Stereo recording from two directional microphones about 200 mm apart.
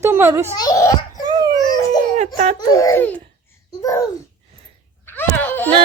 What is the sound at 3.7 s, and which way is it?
Babbling, 15° left (ahead or behind).